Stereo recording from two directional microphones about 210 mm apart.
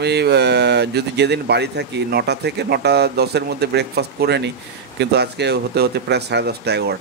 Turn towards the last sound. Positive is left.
turn(degrees=-50)  # may be behind; listen again after turning